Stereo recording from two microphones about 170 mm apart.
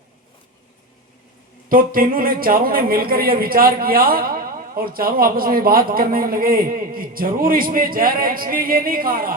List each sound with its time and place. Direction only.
1.7 s speech: 55° right (ahead or behind)